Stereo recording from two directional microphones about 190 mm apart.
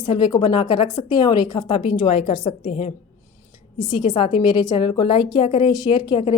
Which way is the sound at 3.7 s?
25° left (ahead or behind).